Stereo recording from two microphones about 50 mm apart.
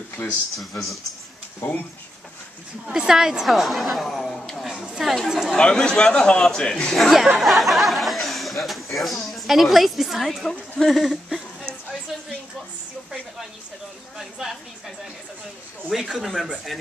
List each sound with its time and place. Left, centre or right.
0.2 s a man's voice: left
0.6 s a woman's voice: centre
3.1 s a woman's voice: centre
4.6 s speech: centre
5.6 s a man's voice: centre
7.0 s a woman's voice: centre
15.9 s a woman's voice: centre